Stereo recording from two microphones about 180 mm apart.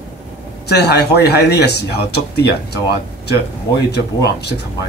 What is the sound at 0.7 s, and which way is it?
Speech, 65° left (ahead or behind).